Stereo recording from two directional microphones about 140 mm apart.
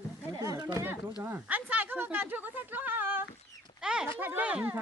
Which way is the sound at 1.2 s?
10° right (ahead or behind).